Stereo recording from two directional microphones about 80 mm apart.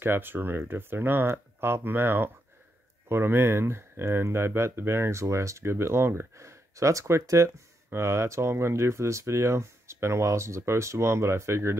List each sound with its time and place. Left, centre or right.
0.0 s speech: right